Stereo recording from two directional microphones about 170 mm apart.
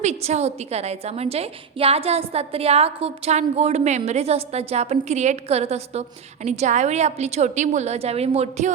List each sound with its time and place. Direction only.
0.0 s a woman's voice: 40° right (ahead or behind)